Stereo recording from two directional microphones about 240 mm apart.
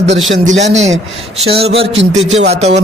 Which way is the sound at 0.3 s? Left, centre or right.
Right.